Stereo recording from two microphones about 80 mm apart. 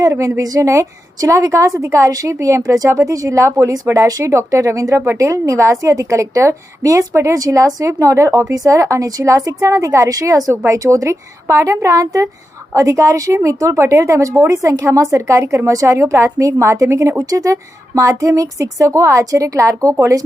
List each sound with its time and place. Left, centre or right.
0.1 s a woman's voice: right